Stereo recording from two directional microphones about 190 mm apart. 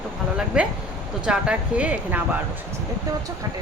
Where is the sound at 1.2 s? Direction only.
5° right (ahead or behind).